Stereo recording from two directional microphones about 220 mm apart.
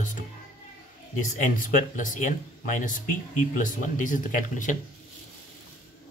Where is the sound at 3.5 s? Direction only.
35° left (ahead or behind).